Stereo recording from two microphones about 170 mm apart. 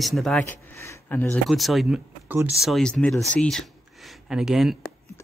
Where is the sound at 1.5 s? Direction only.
Centre (ahead or behind).